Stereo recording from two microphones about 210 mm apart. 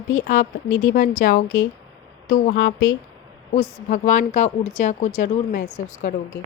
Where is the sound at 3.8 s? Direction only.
35° left (ahead or behind).